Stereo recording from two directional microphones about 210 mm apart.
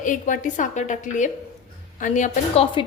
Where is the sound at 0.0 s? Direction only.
40° left (ahead or behind).